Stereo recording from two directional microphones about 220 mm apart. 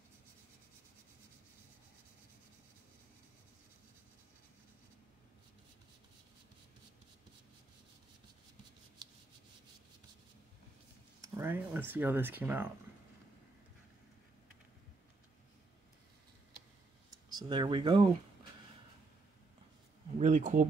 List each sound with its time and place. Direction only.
11.1 s speech: 10° right (ahead or behind)
17.3 s speech: 20° right (ahead or behind)
20.2 s speech: 35° right (ahead or behind)